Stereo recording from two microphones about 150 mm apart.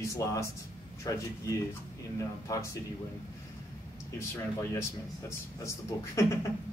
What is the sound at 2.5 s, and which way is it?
Speech, 20° left (ahead or behind).